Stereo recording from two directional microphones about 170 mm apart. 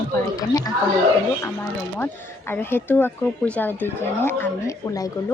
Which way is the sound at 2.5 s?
10° left (ahead or behind).